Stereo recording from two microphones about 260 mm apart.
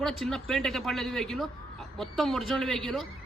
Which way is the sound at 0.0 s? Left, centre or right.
Centre.